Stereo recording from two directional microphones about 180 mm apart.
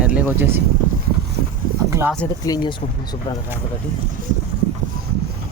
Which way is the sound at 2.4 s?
20° left (ahead or behind).